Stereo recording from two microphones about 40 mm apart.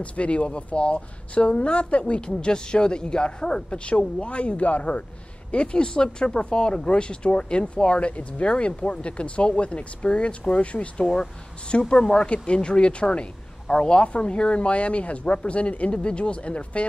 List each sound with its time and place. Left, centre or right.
0.0 s speech: left
11.9 s speech: centre